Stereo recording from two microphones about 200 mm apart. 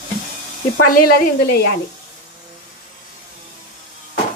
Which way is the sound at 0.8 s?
45° left (ahead or behind).